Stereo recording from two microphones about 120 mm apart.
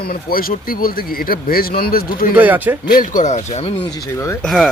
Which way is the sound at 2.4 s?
15° right (ahead or behind).